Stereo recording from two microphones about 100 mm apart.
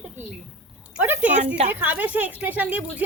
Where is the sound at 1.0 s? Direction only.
15° right (ahead or behind).